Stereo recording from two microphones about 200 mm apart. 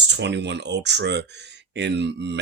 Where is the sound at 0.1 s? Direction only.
60° right (ahead or behind).